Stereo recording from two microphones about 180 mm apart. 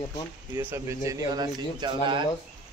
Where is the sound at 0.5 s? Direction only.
15° right (ahead or behind).